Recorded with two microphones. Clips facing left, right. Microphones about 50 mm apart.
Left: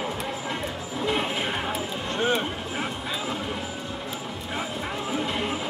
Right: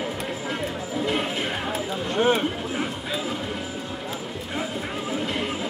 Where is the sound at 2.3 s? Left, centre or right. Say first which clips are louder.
Right 3 dB; centre.